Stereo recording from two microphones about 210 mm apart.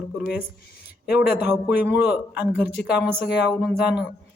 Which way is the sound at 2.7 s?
55° left (ahead or behind).